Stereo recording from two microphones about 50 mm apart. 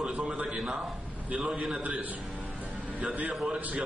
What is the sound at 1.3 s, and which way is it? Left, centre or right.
Speech, right.